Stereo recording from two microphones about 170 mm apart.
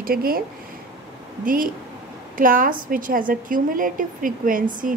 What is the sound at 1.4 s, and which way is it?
A woman's voice, 55° right (ahead or behind).